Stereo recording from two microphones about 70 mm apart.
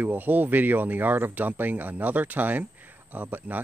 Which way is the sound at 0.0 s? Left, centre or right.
Right.